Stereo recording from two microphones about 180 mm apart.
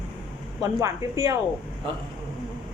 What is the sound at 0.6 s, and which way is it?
Speech, 20° right (ahead or behind).